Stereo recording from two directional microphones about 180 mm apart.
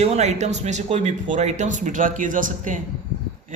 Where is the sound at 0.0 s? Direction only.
40° right (ahead or behind).